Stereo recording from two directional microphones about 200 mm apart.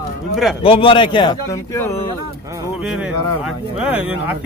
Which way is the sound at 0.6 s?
25° left (ahead or behind).